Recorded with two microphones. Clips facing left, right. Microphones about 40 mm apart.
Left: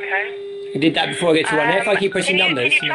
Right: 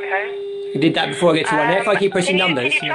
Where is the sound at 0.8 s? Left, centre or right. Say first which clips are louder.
Right 1 dB; centre.